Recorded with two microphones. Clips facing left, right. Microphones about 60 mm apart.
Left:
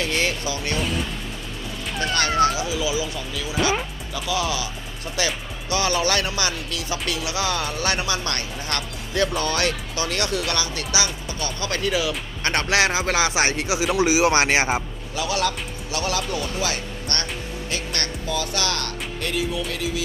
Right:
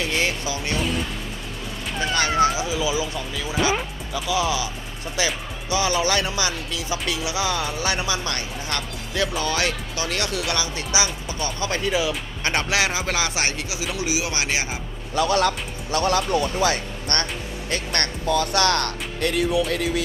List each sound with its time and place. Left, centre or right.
0.0 s speech: centre
2.0 s speech: centre
12.4 s speech: centre
13.4 s speech: left
15.1 s a man's voice: right
17.7 s speech: right